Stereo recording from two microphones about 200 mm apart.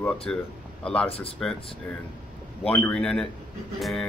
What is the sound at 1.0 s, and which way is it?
Speech, 30° left (ahead or behind).